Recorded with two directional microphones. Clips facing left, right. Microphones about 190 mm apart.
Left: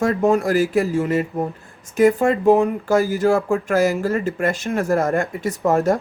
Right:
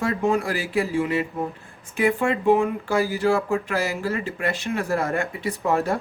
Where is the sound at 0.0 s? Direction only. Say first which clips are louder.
Left 5 dB; 45° left (ahead or behind).